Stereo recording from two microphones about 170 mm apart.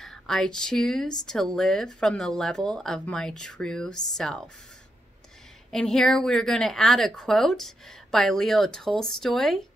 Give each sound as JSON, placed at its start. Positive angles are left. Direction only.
{"t": 0.0, "sound": "a woman's voice", "side_deg": 0}
{"t": 5.7, "sound": "a woman's voice", "side_deg": 5}